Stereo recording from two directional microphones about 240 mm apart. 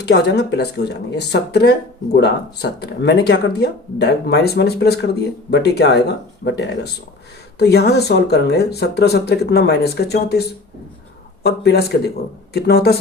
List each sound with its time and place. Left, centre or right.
0.0 s speech: left